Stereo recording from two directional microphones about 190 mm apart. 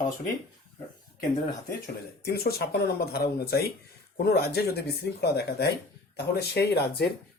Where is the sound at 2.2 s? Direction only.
55° left (ahead or behind).